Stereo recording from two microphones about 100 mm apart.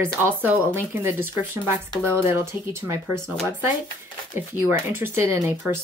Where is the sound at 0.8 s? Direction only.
25° right (ahead or behind).